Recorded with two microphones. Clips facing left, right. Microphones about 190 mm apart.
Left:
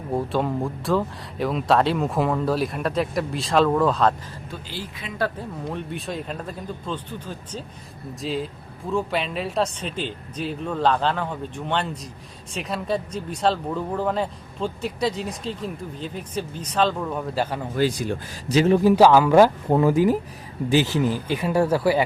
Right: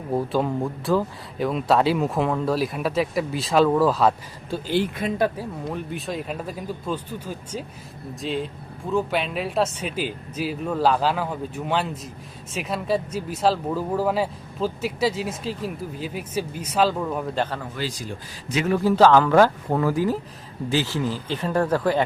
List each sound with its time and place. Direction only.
0.1 s speech: centre (ahead or behind)
4.7 s speech: 55° right (ahead or behind)
5.4 s speech: centre (ahead or behind)
17.7 s speech: 60° left (ahead or behind)
18.4 s a man's voice: 30° left (ahead or behind)
18.8 s speech: 15° left (ahead or behind)